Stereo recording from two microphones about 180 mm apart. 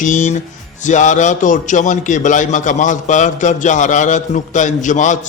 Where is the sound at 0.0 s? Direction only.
45° left (ahead or behind).